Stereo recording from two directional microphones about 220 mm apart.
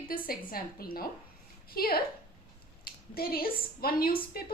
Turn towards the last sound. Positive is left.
turn(degrees=45)  # may be behind; listen again after turning